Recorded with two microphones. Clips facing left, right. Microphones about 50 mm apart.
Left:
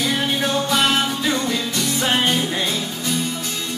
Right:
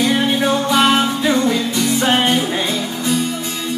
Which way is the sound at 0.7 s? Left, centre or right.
Centre.